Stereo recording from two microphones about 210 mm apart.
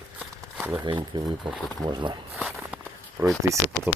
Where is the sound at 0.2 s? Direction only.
5° right (ahead or behind).